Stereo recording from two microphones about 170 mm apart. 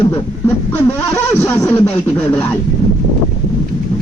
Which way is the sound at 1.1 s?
15° left (ahead or behind).